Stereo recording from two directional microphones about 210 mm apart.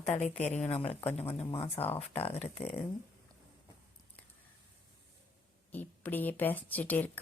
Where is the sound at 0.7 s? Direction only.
25° left (ahead or behind).